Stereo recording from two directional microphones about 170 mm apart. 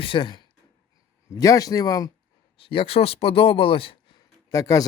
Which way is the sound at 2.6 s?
35° left (ahead or behind).